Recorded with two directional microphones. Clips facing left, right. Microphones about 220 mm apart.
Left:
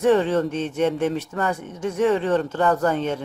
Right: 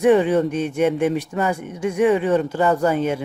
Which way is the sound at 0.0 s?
15° right (ahead or behind).